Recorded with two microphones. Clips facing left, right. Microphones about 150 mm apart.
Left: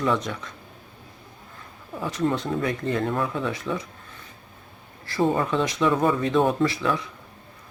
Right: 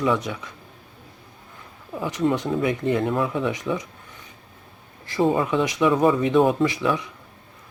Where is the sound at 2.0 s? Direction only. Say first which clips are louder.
Right 2 dB; 15° right (ahead or behind).